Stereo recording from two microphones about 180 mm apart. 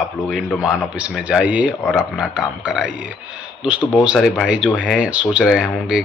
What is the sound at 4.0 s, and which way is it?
Speech, centre (ahead or behind).